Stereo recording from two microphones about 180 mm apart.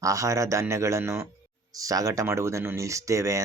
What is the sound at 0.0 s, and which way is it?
Speech, 20° right (ahead or behind).